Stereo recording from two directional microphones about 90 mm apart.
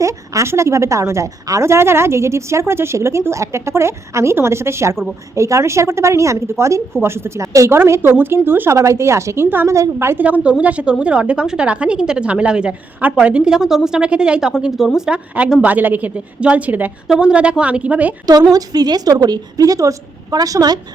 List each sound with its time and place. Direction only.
0.0 s a woman's voice: 35° right (ahead or behind)
10.2 s a woman's voice: 15° right (ahead or behind)
18.5 s a woman's voice: 45° right (ahead or behind)